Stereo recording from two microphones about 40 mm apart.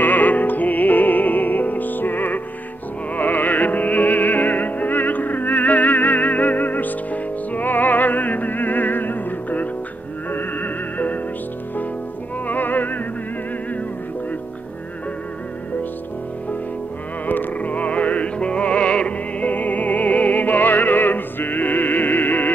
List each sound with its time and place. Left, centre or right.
0.0 s music: left
12.4 s music: left
17.3 s music: left
19.5 s music: left